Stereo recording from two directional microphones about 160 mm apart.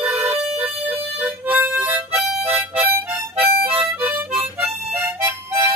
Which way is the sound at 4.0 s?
10° right (ahead or behind).